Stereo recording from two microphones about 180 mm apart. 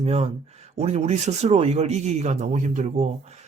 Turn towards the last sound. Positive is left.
turn(degrees=-40)  # may be behind; listen again after turning